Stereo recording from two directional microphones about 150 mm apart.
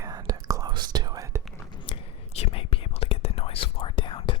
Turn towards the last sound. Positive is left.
turn(degrees=35)  # may be behind; listen again after turning